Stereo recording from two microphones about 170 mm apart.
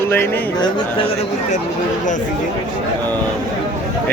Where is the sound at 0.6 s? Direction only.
30° left (ahead or behind).